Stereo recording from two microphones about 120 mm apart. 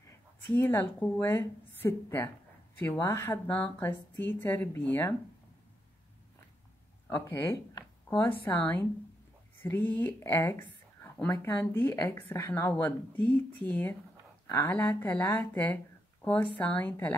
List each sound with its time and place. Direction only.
0.6 s a woman's voice: 20° left (ahead or behind)
7.1 s a woman's voice: 20° left (ahead or behind)
7.7 s a sound: 40° left (ahead or behind)
8.5 s speech: 15° left (ahead or behind)
11.3 s speech: 30° left (ahead or behind)
11.7 s a woman's voice: 20° left (ahead or behind)
12.7 s speech: 15° left (ahead or behind)